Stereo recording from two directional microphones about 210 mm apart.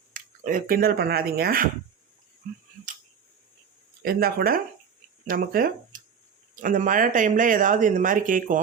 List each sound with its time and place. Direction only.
0.1 s speech: 40° right (ahead or behind)
4.0 s speech: 45° right (ahead or behind)